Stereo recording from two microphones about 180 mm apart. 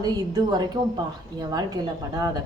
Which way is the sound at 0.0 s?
20° right (ahead or behind).